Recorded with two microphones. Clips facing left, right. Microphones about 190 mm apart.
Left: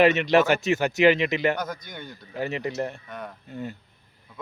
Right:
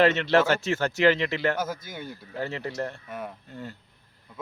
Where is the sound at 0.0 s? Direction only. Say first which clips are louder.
Left 2 dB; 15° left (ahead or behind).